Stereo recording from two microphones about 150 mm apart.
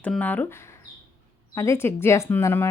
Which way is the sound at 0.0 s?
10° left (ahead or behind).